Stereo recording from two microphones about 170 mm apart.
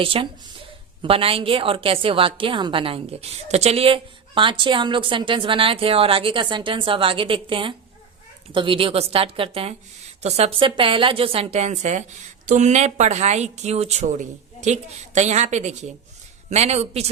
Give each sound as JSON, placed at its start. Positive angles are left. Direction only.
{"t": 0.0, "sound": "a woman's voice", "side_deg": -30}